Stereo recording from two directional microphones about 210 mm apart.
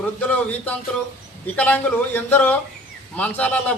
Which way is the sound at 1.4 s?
10° left (ahead or behind).